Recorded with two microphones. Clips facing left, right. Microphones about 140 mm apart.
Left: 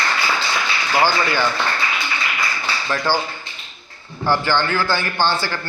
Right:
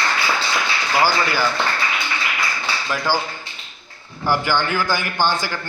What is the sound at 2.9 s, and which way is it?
Speech, 10° right (ahead or behind).